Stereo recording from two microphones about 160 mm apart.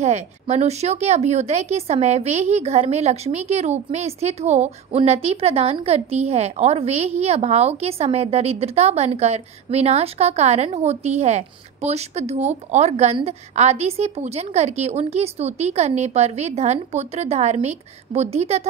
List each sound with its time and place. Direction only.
0.0 s a woman's voice: 45° right (ahead or behind)